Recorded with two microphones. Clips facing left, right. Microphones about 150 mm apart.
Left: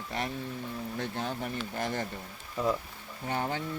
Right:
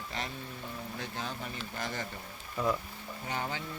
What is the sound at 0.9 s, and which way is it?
Speech, 50° left (ahead or behind).